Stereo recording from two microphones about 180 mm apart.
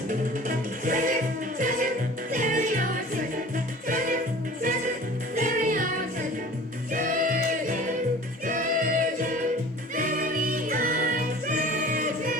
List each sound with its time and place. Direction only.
0.1 s music: 50° right (ahead or behind)
5.3 s music: 50° right (ahead or behind)
6.9 s music: 50° right (ahead or behind)